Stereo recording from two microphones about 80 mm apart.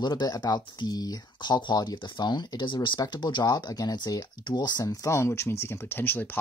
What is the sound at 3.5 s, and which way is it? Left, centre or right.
Speech, left.